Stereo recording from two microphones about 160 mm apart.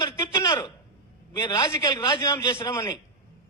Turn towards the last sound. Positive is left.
turn(degrees=20)  # may be behind; listen again after turning